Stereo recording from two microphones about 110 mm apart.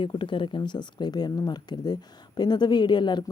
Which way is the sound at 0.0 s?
45° left (ahead or behind).